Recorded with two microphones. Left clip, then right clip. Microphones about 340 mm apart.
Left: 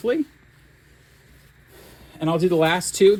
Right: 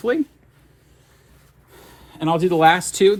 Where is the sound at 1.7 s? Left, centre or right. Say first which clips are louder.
Right 2 dB; right.